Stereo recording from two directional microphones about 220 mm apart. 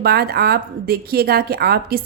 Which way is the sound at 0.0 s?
45° right (ahead or behind).